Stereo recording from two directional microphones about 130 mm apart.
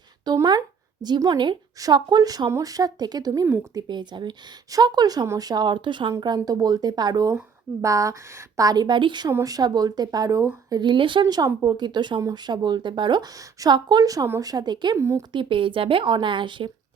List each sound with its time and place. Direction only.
0.3 s a woman's voice: 35° right (ahead or behind)
14.9 s a woman's voice: 20° right (ahead or behind)
15.3 s speech: 40° right (ahead or behind)